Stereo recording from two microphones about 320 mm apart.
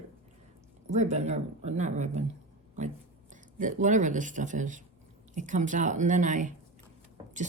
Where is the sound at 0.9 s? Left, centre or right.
Right.